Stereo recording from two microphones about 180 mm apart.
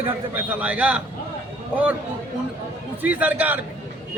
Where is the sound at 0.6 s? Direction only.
5° right (ahead or behind).